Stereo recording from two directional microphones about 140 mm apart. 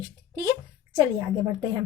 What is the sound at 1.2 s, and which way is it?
Speech, 20° right (ahead or behind).